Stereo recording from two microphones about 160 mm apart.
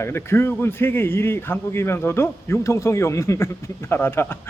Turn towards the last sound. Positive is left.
turn(degrees=15)  # may be behind; listen again after turning